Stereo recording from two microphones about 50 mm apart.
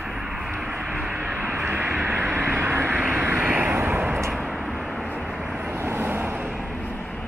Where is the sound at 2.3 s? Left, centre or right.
Right.